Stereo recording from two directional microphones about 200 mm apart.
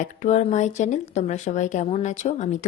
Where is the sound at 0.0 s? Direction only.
35° left (ahead or behind).